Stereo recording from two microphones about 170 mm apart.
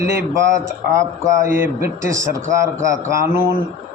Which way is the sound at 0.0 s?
15° right (ahead or behind).